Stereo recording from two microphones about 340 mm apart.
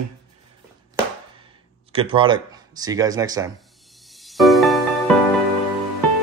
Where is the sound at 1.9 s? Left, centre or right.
Centre.